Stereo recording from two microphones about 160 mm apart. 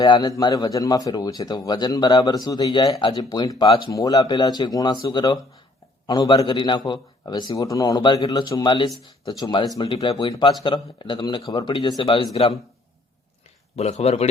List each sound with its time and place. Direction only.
0.0 s a man's voice: 25° left (ahead or behind)
13.7 s speech: 40° left (ahead or behind)